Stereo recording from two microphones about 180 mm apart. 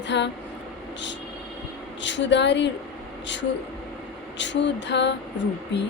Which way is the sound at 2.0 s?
85° left.